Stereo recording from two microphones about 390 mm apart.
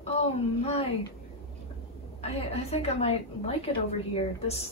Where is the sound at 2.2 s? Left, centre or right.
Centre.